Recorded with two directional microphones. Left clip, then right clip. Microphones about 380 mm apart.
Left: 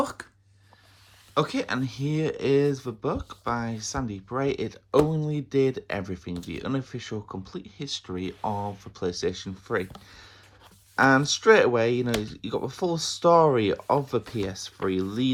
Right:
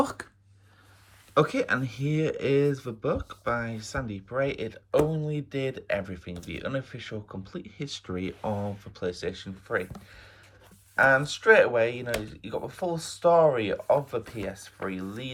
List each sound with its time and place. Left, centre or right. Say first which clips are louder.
0.0 s a sound: right 1 dB; centre
1.3 s speech: right 2 dB; centre
10.9 s speech: left 1 dB; centre